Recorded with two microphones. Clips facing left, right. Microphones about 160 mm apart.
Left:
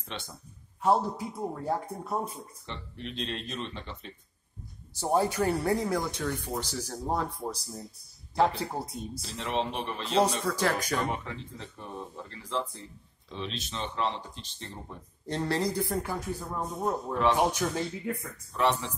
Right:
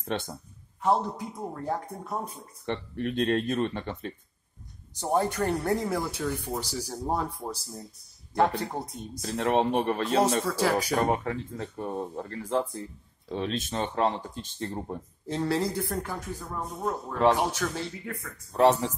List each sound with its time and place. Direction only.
0.0 s speech: 50° right (ahead or behind)
0.8 s speech: 5° left (ahead or behind)
2.6 s speech: 55° right (ahead or behind)
5.0 s speech: 5° left (ahead or behind)
8.4 s speech: centre (ahead or behind)
9.2 s speech: 50° right (ahead or behind)
10.2 s speech: 5° right (ahead or behind)
11.1 s speech: 50° right (ahead or behind)
15.2 s speech: centre (ahead or behind)
16.0 s speech: 15° left (ahead or behind)
18.5 s speech: 40° right (ahead or behind)